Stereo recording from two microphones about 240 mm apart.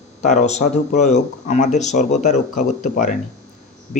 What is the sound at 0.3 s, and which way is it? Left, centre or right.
A man's voice, left.